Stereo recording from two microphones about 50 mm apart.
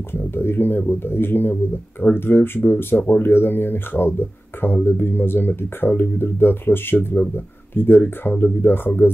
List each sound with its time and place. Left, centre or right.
0.1 s speech: left